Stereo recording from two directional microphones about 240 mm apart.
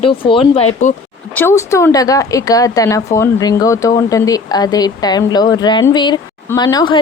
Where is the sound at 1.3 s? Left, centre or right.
Centre.